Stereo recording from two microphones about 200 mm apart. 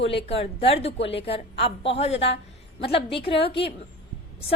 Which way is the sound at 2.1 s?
60° left (ahead or behind).